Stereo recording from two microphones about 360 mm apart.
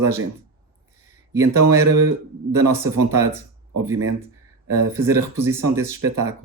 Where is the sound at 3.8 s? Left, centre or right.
Centre.